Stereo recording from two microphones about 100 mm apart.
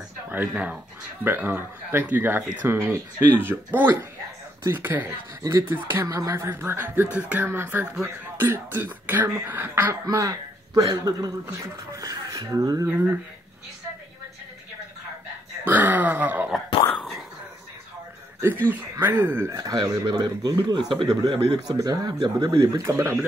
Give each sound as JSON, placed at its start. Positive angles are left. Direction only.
{"t": 1.2, "sound": "speech", "side_deg": -20}
{"t": 6.0, "sound": "speech", "side_deg": -35}
{"t": 10.0, "sound": "speech", "side_deg": -35}
{"t": 12.8, "sound": "speech", "side_deg": -20}
{"t": 15.6, "sound": "speech", "side_deg": -15}
{"t": 18.4, "sound": "a man's voice", "side_deg": -20}
{"t": 21.1, "sound": "speech", "side_deg": -40}
{"t": 22.6, "sound": "speech", "side_deg": -35}